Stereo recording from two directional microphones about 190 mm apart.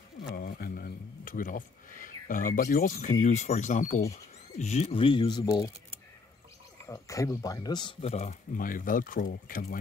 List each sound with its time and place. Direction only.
0.4 s speech: 50° left (ahead or behind); by 5.7 s 20° left (ahead or behind)
6.9 s speech: 15° left (ahead or behind); by 9.8 s 45° left (ahead or behind)